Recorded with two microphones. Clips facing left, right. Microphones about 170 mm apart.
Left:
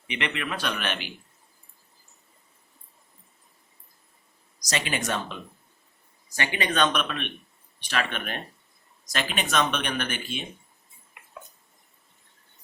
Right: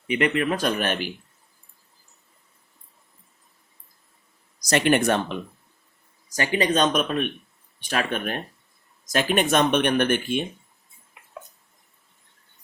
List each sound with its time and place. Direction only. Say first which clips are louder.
0.1 s speech: right 9 dB; 40° right (ahead or behind)
4.7 s speech: right 9 dB; 60° right (ahead or behind)
6.3 s speech: right 5 dB; 40° right (ahead or behind)